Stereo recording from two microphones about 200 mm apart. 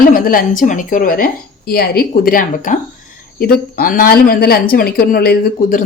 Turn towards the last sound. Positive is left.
turn(degrees=50)  # may be behind; listen again after turning